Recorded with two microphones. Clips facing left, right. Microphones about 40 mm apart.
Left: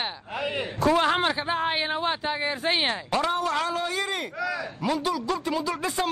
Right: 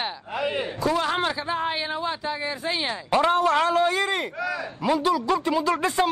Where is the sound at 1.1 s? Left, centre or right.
Centre; by 2.9 s left.